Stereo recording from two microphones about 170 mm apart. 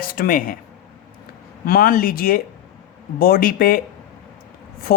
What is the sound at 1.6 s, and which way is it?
Speech, 60° left (ahead or behind).